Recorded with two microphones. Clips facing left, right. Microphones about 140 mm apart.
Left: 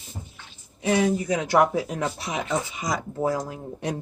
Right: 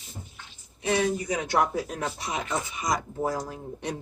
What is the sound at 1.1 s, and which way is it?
Speech, 90° left.